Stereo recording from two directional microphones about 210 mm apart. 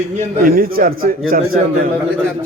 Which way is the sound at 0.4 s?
45° right (ahead or behind).